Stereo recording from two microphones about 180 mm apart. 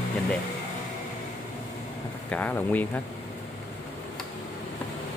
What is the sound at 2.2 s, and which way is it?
Speech, 10° left (ahead or behind).